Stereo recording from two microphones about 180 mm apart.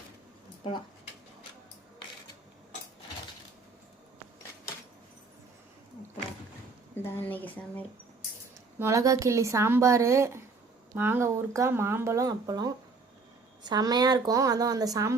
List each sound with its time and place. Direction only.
7.0 s speech: 10° left (ahead or behind)
8.8 s a woman's voice: 15° right (ahead or behind)